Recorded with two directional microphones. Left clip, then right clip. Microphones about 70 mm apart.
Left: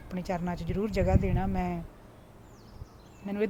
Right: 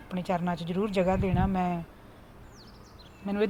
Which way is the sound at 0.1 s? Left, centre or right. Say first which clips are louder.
Right 4 dB; centre.